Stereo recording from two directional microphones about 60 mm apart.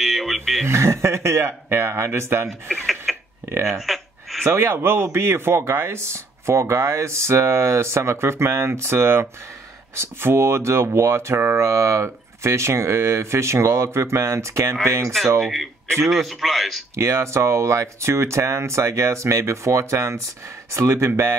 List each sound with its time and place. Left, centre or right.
0.0 s a sound: centre
0.7 s speech: right
3.1 s a sound: centre
4.5 s speech: right
15.4 s a man's voice: centre
16.9 s speech: right